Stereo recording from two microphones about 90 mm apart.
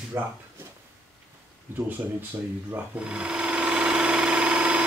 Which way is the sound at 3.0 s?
10° right (ahead or behind).